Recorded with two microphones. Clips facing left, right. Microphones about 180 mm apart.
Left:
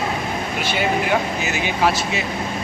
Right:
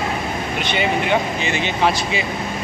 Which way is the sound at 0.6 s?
5° left (ahead or behind).